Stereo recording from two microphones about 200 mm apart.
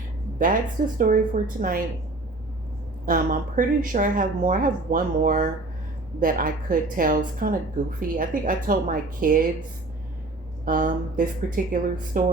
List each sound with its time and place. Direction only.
0.3 s a woman's voice: 40° right (ahead or behind)
3.1 s a woman's voice: 40° right (ahead or behind)
10.7 s a woman's voice: 40° right (ahead or behind)